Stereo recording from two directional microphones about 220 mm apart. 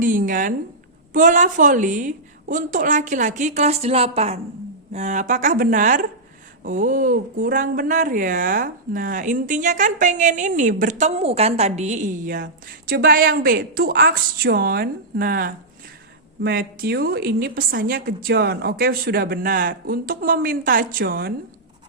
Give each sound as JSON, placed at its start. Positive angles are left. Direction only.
{"t": 0.0, "sound": "a woman's voice", "side_deg": -40}